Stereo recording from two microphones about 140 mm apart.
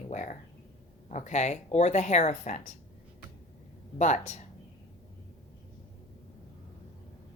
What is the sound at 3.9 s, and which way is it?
Speech, 55° left (ahead or behind).